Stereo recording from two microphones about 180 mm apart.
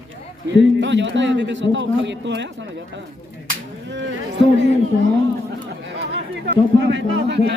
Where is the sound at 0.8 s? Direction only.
85° right.